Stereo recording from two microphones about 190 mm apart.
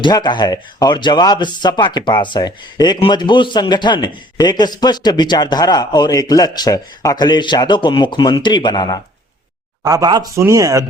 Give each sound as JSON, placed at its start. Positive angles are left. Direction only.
{"t": 0.0, "sound": "speech", "side_deg": 25}
{"t": 9.8, "sound": "speech", "side_deg": -20}